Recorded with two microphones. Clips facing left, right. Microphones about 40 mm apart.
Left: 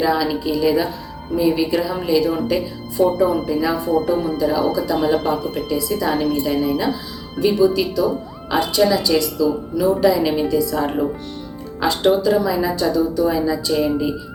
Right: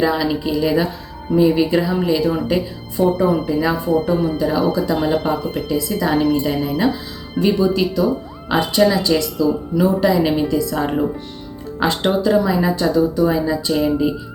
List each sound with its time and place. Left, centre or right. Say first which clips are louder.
0.0 s speech: right 1 dB; centre